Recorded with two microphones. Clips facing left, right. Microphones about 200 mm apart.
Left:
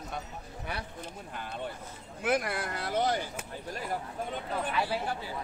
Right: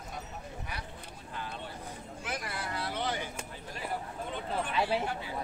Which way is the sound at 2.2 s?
60° left (ahead or behind).